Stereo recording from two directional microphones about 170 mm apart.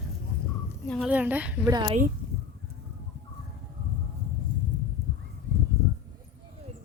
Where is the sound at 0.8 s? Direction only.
5° left (ahead or behind).